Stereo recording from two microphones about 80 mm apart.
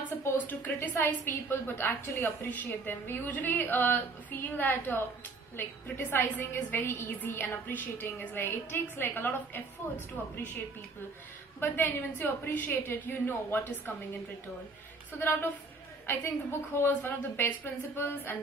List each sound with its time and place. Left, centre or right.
0.4 s a woman's voice: left
11.6 s a woman's voice: left